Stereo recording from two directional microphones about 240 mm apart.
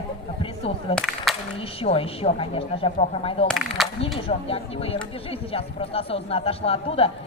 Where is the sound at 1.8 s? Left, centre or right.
Left.